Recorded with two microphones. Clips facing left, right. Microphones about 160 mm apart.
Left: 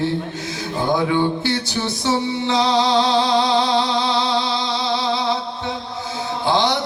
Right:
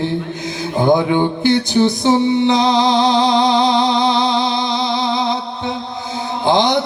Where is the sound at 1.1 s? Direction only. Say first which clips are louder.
Right 5 dB; 20° right (ahead or behind).